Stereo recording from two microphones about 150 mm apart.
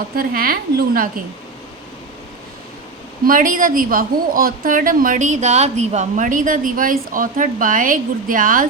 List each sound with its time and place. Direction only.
0.2 s a woman's voice: 80° right
3.2 s a woman's voice: 65° right (ahead or behind)